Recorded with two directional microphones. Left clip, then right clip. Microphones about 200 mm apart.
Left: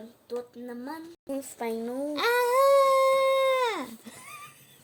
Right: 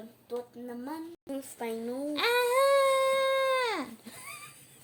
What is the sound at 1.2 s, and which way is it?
Speech, 30° left (ahead or behind).